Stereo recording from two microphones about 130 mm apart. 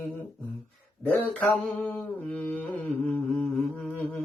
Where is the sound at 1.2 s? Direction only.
15° left (ahead or behind).